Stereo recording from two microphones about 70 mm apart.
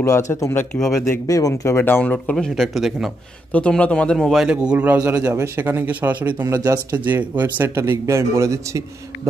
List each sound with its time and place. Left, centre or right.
0.0 s speech: left
1.2 s speech: left
1.6 s speech: left
2.0 s a man's voice: centre
2.3 s a man's voice: centre
3.5 s a man's voice: centre
4.2 s a man's voice: centre
4.5 s a man's voice: centre
5.2 s speech: right
6.4 s a man's voice: right
7.1 s speech: right
7.7 s a man's voice: right